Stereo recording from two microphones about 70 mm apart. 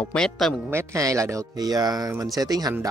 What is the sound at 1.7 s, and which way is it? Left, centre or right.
Speech, right.